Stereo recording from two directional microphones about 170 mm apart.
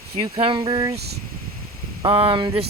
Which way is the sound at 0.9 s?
70° right (ahead or behind).